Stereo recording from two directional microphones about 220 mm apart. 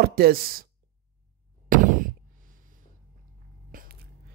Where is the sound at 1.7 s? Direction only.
35° right (ahead or behind).